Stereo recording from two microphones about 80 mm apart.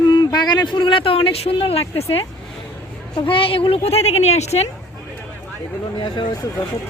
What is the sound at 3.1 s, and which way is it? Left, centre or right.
Speech, left.